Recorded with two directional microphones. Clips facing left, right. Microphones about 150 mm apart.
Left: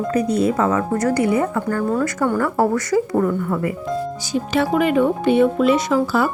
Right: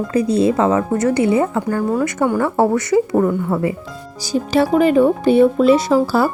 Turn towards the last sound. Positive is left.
turn(degrees=-35)  # may be behind; listen again after turning